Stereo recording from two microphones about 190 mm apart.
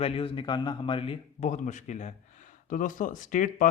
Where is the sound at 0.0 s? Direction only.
30° left (ahead or behind).